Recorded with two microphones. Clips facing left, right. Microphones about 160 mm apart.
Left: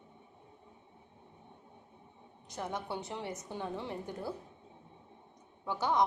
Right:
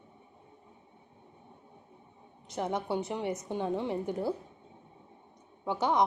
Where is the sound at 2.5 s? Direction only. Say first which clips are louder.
Right 7 dB; 20° right (ahead or behind).